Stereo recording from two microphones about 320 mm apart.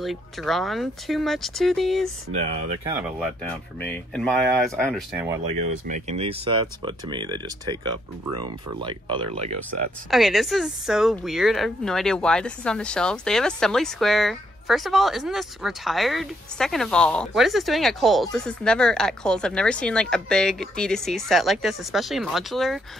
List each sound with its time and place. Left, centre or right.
0.0 s speech: centre
2.3 s speech: right
3.0 s speech: centre
5.9 s speech: right
10.1 s speech: centre